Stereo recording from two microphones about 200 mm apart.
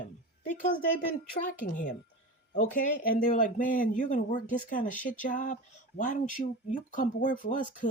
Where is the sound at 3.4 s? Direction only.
40° left (ahead or behind).